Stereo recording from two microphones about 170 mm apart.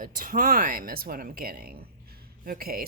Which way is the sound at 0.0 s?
55° right (ahead or behind).